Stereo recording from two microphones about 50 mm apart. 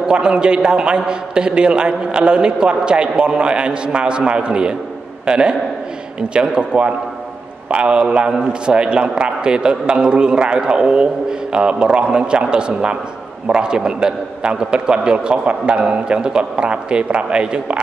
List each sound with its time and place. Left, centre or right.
0.0 s a man's voice: centre